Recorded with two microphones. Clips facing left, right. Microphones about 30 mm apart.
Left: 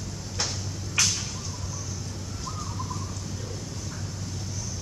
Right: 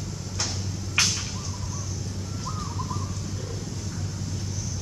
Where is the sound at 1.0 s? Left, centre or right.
Right.